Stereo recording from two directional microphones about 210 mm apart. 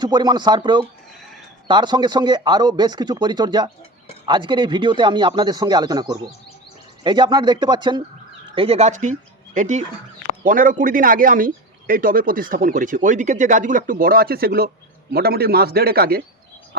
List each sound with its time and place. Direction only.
0.0 s a man's voice: 20° right (ahead or behind); by 16.2 s 45° right (ahead or behind)